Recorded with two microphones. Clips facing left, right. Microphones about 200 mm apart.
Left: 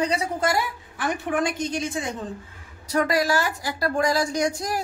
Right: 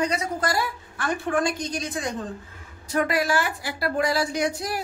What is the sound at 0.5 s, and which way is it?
A woman's voice, 20° left (ahead or behind).